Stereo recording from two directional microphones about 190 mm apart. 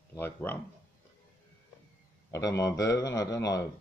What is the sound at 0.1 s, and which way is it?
Speech, 10° left (ahead or behind).